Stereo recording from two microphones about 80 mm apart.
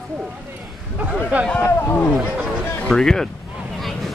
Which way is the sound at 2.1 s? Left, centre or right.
Centre.